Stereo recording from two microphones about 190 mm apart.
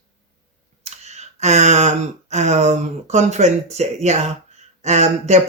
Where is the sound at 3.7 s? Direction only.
35° right (ahead or behind).